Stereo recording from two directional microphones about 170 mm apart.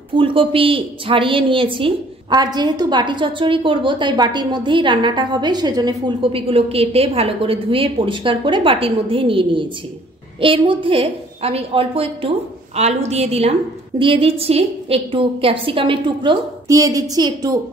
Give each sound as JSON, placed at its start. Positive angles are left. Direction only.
{"t": 0.1, "sound": "a woman's voice", "side_deg": -30}